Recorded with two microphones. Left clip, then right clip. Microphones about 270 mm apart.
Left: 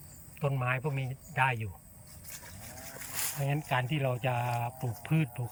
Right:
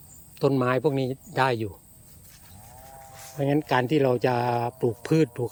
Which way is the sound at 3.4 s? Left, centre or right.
Right.